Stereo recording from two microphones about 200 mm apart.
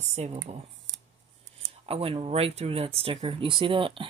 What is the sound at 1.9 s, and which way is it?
Speech, 30° right (ahead or behind).